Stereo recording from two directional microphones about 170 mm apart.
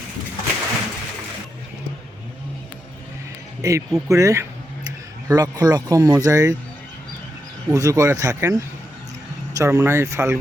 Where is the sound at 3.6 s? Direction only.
20° right (ahead or behind).